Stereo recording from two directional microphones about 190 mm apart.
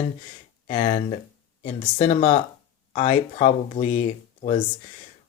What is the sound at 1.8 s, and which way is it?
Speech, 35° left (ahead or behind).